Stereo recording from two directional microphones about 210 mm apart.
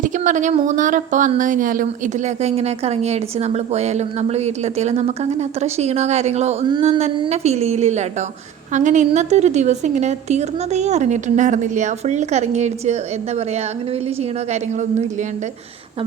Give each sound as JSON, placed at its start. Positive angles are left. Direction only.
{"t": 0.0, "sound": "speech", "side_deg": -35}